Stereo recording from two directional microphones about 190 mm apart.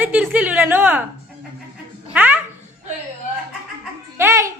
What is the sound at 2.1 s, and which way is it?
Babbling, 10° right (ahead or behind).